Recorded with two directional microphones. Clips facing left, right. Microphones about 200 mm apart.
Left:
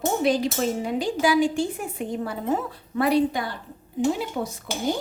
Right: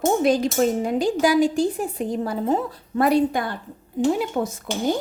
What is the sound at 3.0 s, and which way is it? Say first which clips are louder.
Speech: right 2 dB; 45° right (ahead or behind).